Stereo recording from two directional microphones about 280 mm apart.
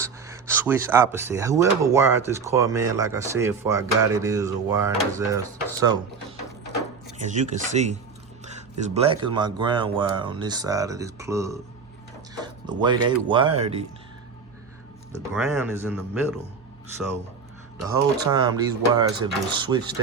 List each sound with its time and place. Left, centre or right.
0.0 s speech: centre
7.3 s speech: right
15.1 s speech: centre
17.8 s speech: centre